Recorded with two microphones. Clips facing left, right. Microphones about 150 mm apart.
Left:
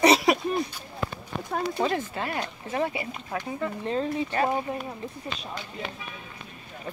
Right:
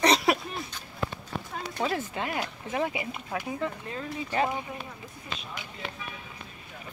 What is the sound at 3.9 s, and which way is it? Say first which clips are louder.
Speech: left 8 dB; 30° left (ahead or behind).